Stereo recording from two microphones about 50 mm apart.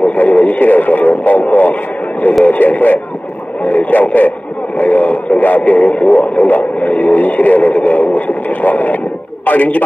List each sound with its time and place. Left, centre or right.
0.0 s radio: left
2.4 s speech: left